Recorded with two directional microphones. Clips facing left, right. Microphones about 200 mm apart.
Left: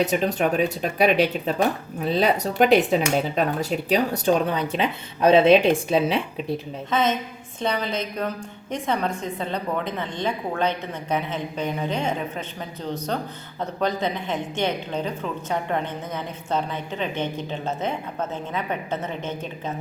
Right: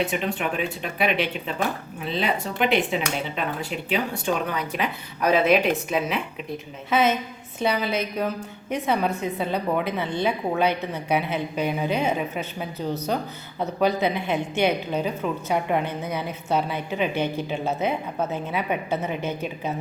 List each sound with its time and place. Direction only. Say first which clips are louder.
0.0 s speech: left 4 dB; 40° left (ahead or behind)
6.9 s speech: right 2 dB; 10° right (ahead or behind)